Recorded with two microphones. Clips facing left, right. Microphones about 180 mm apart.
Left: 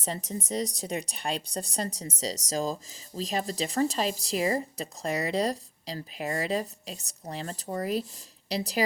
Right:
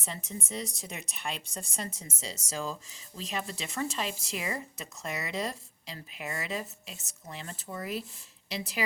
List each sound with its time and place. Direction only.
0.0 s speech: 40° left (ahead or behind)